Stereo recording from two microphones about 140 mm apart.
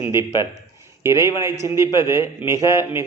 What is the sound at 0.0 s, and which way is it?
A man's voice, 15° right (ahead or behind).